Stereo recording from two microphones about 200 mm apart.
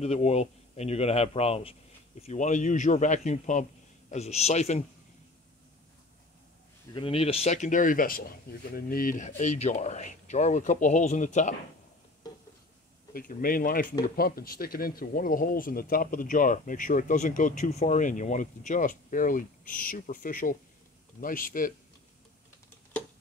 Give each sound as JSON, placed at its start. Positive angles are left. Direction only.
{"t": 0.0, "sound": "speech", "side_deg": 35}
{"t": 6.9, "sound": "speech", "side_deg": 25}
{"t": 13.1, "sound": "speech", "side_deg": 45}